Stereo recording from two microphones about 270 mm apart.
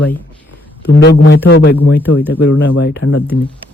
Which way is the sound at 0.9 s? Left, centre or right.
Left.